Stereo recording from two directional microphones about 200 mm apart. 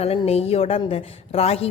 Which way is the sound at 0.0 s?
30° left (ahead or behind).